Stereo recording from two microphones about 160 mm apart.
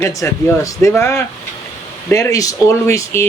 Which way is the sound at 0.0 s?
20° left (ahead or behind).